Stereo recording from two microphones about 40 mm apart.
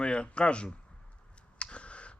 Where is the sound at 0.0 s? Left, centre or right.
Left.